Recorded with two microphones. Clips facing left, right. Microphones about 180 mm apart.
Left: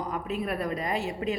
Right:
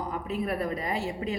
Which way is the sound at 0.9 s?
20° left (ahead or behind).